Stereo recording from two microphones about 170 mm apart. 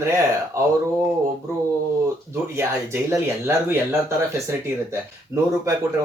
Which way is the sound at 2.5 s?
15° right (ahead or behind).